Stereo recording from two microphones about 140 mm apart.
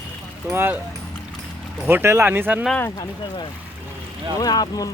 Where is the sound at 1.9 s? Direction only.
15° right (ahead or behind).